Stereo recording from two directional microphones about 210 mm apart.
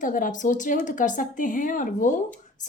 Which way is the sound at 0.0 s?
40° left (ahead or behind).